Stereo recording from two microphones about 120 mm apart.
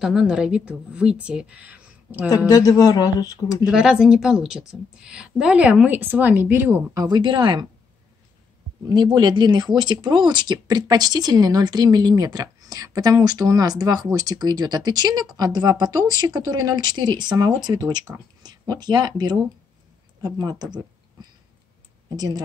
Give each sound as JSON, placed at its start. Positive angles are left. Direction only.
{"t": 0.0, "sound": "a woman's voice", "side_deg": -5}
{"t": 2.2, "sound": "speech", "side_deg": 30}
{"t": 3.6, "sound": "a woman's voice", "side_deg": -5}
{"t": 6.9, "sound": "speech", "side_deg": -35}
{"t": 8.8, "sound": "speech", "side_deg": -35}